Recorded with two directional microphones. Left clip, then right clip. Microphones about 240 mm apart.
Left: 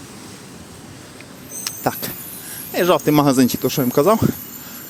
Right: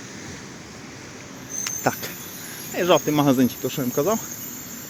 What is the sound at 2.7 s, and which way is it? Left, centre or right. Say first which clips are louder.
Speech: left 4 dB; left.